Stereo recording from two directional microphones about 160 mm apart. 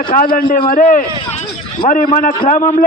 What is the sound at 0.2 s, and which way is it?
A man's voice, 55° left (ahead or behind).